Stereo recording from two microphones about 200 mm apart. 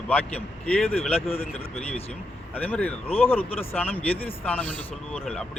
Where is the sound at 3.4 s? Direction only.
30° left (ahead or behind).